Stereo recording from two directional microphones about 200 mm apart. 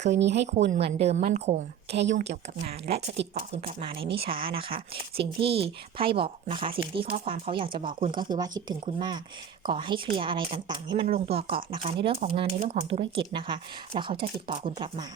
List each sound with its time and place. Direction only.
0.1 s speech: 60° right (ahead or behind)
0.7 s a woman's voice: 30° right (ahead or behind)
1.9 s speech: 60° right (ahead or behind)
2.1 s a woman's voice: 35° right (ahead or behind)